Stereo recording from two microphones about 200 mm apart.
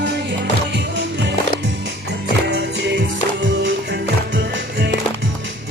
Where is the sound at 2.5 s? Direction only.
60° right (ahead or behind).